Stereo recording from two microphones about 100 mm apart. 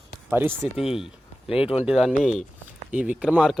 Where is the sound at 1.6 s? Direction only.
75° left (ahead or behind).